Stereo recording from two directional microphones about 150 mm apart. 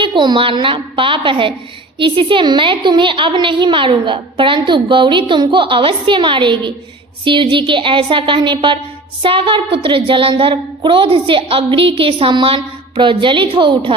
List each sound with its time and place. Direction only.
0.0 s a woman's voice: 30° right (ahead or behind)